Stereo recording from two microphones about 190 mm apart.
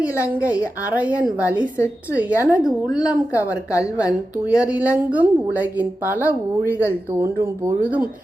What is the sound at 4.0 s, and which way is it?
A woman's voice, 5° right (ahead or behind).